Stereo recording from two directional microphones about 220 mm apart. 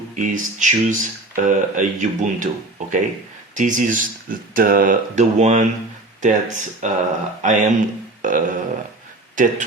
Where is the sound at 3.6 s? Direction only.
35° right (ahead or behind).